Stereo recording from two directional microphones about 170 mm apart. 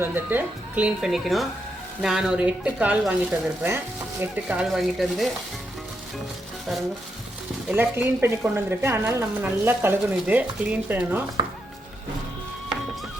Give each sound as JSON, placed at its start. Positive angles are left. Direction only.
{"t": 0.0, "sound": "a woman's voice", "side_deg": -10}
{"t": 7.7, "sound": "a woman's voice", "side_deg": -10}